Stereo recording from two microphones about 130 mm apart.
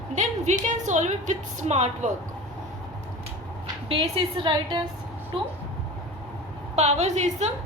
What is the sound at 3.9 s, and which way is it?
Speech, 40° right (ahead or behind).